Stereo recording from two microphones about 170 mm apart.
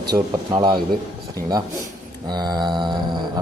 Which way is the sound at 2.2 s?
25° right (ahead or behind).